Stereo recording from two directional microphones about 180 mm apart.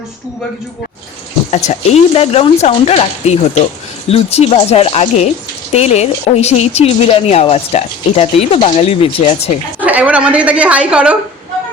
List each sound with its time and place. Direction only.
1.5 s speech: 35° left (ahead or behind)
9.8 s a woman's voice: 10° right (ahead or behind)